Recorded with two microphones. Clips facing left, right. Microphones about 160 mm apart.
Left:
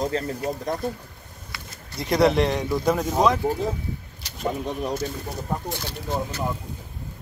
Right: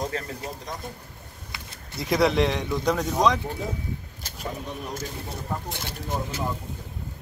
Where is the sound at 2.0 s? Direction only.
Centre (ahead or behind).